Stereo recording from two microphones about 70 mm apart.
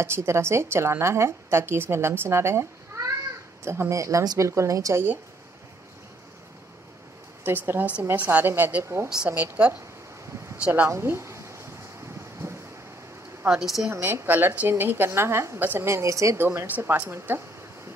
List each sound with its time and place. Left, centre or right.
0.0 s a woman's voice: right
7.4 s a woman's voice: right
9.3 s a woman's voice: right
10.9 s a sound: right
13.5 s speech: centre
13.9 s a woman's voice: right
15.9 s a woman's voice: right
16.3 s a woman's voice: right